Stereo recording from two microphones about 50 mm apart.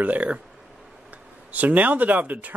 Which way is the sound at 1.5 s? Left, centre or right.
Right.